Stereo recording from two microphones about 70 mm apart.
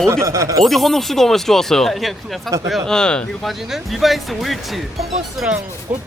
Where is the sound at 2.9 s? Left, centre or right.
Centre.